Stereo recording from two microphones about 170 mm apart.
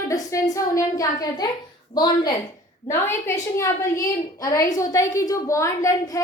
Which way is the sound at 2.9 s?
15° left (ahead or behind).